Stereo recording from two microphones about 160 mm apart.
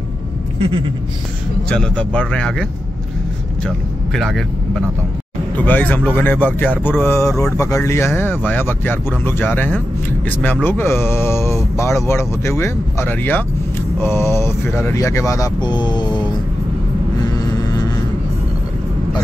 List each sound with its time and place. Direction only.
0.6 s a sound: 35° right (ahead or behind)
1.7 s speech: 5° left (ahead or behind)
3.6 s speech: centre (ahead or behind)
5.7 s speech: 10° left (ahead or behind); by 16.3 s 25° left (ahead or behind)